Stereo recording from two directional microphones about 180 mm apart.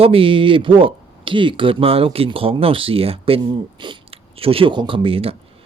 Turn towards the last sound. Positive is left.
turn(degrees=-30)  # may be behind; listen again after turning